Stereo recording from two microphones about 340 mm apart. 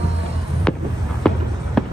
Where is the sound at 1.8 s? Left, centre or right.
Centre.